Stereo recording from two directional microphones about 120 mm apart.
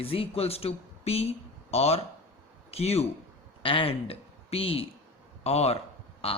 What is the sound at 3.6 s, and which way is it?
A man's voice, 50° left (ahead or behind).